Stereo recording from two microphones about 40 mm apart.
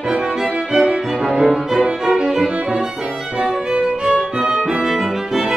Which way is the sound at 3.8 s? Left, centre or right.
Centre.